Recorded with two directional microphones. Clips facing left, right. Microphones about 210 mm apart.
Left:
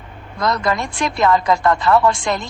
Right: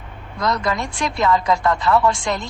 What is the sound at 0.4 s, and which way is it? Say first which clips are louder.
Speech: left 2 dB; 50° left (ahead or behind).